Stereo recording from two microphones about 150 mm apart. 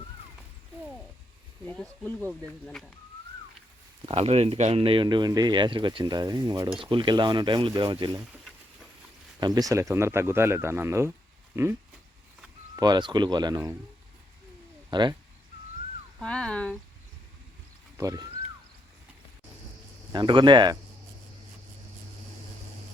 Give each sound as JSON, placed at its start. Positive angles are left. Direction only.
{"t": 1.7, "sound": "speech", "side_deg": 5}
{"t": 4.0, "sound": "speech", "side_deg": -40}
{"t": 9.4, "sound": "speech", "side_deg": -25}
{"t": 14.8, "sound": "speech", "side_deg": -30}
{"t": 16.1, "sound": "a sound", "side_deg": 5}
{"t": 17.9, "sound": "speech", "side_deg": -25}
{"t": 20.1, "sound": "speech", "side_deg": -30}